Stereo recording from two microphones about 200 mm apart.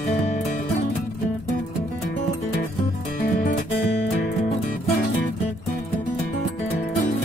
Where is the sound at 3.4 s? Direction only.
40° left (ahead or behind).